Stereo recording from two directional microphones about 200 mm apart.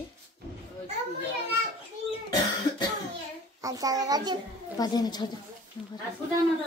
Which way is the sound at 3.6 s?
15° right (ahead or behind).